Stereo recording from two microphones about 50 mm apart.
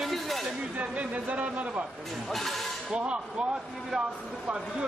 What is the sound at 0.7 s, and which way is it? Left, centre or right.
A man's voice, right.